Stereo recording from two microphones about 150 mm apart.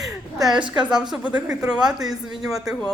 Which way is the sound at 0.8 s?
5° right (ahead or behind).